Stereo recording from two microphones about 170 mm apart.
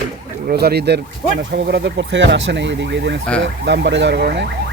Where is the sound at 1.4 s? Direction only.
90° right.